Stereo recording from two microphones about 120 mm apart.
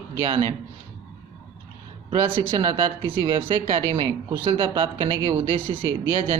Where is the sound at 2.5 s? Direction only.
40° right (ahead or behind).